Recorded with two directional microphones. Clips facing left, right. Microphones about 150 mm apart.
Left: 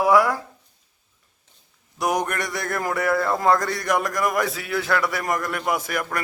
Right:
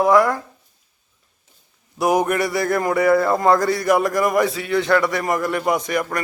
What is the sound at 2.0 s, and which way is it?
Speech, 5° right (ahead or behind).